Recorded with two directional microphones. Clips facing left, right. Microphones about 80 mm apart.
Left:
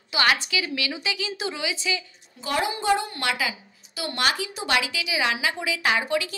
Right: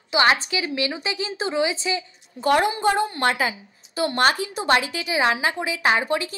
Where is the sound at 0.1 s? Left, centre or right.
Right.